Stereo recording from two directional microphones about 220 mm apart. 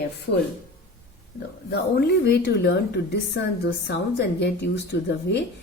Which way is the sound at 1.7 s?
45° left (ahead or behind).